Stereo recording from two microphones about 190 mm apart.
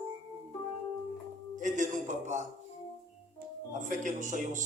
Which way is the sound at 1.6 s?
40° right (ahead or behind).